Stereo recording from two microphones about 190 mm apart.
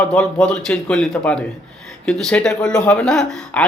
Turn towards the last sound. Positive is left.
turn(degrees=5)  # may be behind; listen again after turning